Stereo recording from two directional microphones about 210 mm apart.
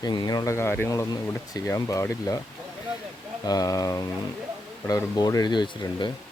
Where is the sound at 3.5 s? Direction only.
15° left (ahead or behind).